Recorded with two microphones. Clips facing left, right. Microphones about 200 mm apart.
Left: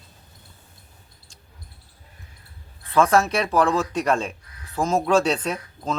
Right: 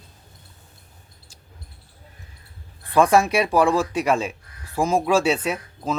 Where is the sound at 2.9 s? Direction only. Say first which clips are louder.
Right 2 dB; 15° right (ahead or behind).